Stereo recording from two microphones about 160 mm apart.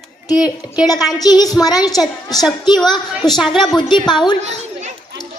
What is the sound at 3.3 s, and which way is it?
Speech, centre (ahead or behind).